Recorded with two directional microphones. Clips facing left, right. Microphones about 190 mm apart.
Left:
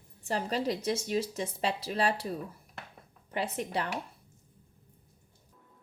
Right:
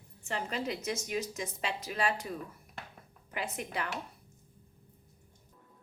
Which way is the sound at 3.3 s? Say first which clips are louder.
Left 4 dB; 35° left (ahead or behind).